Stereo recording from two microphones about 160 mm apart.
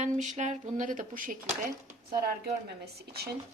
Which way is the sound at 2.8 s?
80° right.